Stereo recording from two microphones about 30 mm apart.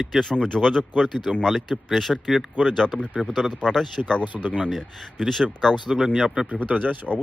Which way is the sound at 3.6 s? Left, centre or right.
Left.